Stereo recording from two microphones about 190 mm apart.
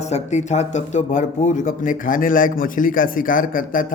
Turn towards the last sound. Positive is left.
turn(degrees=45)  # may be behind; listen again after turning